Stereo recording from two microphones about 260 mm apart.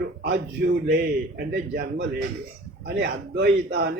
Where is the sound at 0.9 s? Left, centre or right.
Right.